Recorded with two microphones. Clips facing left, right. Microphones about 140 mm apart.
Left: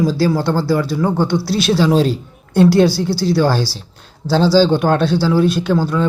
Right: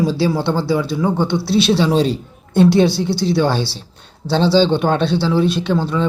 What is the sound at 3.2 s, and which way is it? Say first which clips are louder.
Speech: left 2 dB; centre (ahead or behind).